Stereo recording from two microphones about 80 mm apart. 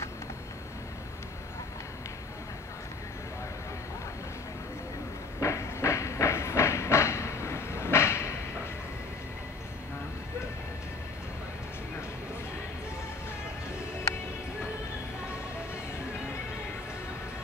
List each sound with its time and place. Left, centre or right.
5.4 s train: left